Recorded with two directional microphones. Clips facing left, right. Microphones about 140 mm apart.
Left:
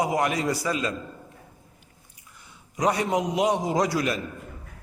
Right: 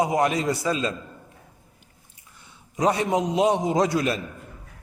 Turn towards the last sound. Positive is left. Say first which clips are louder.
# right 2 dB
turn(degrees=-25)  # may be behind; listen again after turning